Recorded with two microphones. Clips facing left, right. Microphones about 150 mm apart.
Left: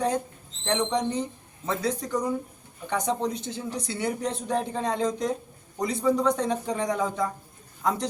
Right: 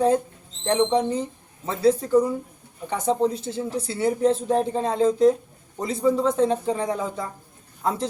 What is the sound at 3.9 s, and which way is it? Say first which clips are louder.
A man's voice: right 9 dB; 30° right (ahead or behind).